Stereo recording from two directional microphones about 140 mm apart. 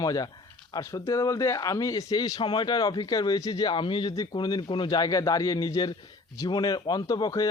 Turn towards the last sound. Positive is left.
turn(degrees=25)  # may be behind; listen again after turning